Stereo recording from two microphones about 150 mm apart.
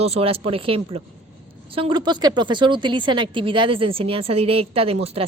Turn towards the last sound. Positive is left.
turn(degrees=-40)  # may be behind; listen again after turning